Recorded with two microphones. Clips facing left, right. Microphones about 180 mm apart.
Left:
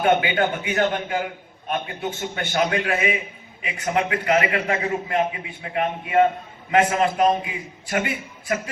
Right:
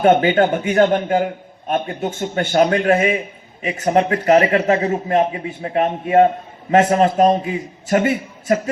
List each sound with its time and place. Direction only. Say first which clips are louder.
0.0 s a man's voice: right 6 dB; 45° right (ahead or behind)